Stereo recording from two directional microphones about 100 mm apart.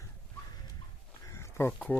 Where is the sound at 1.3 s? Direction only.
30° left (ahead or behind).